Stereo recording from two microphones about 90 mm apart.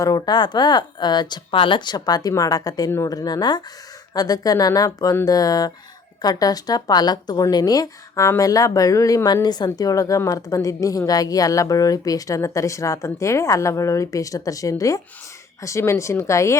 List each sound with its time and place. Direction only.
0.0 s speech: 50° left (ahead or behind)
1.5 s a woman's voice: 70° left (ahead or behind); by 16.6 s 35° left (ahead or behind)